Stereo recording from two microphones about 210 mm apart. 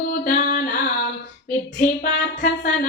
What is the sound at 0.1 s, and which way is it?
Music, 45° left (ahead or behind).